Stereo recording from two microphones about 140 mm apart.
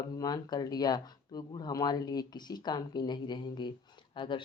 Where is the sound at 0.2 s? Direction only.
30° left (ahead or behind).